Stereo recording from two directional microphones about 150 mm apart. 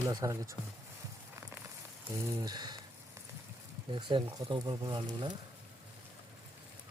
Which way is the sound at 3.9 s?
35° right (ahead or behind).